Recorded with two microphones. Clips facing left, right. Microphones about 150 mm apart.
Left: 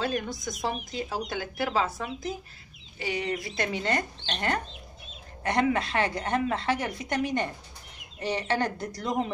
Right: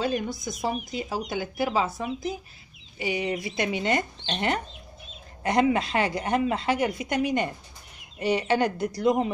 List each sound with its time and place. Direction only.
0.6 s a woman's voice: 10° right (ahead or behind)